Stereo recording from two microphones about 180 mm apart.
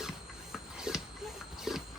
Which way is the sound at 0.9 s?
5° right (ahead or behind).